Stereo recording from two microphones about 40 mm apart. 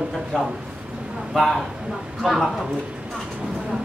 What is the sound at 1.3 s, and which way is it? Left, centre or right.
Speech, centre.